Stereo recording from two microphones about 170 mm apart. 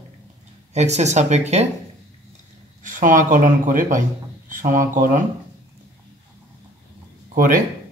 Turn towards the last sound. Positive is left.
turn(degrees=-55)  # may be behind; listen again after turning